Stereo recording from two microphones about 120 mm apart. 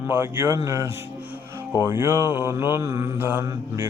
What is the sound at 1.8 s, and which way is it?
Mantra, 20° right (ahead or behind).